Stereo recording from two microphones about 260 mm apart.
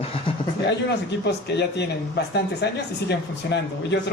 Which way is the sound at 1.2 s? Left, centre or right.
Left.